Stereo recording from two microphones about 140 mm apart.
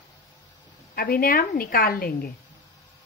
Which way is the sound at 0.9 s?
90° left.